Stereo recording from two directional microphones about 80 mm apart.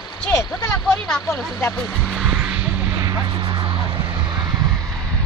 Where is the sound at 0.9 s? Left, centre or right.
Centre.